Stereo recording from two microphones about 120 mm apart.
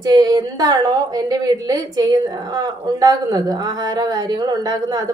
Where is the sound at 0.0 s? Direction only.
35° right (ahead or behind).